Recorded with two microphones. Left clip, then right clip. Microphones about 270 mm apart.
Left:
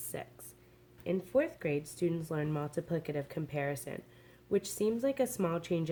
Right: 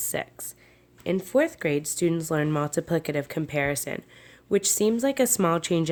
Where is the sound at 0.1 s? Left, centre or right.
Right.